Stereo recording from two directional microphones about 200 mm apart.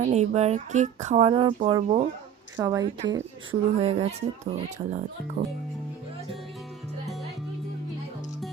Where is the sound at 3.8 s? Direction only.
30° right (ahead or behind).